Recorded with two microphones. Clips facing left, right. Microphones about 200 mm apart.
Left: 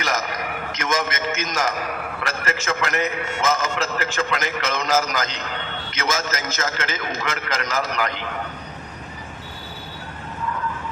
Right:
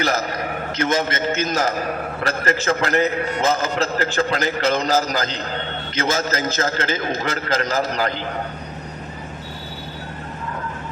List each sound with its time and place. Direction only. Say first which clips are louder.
0.0 s a man's voice: right 4 dB; 35° right (ahead or behind)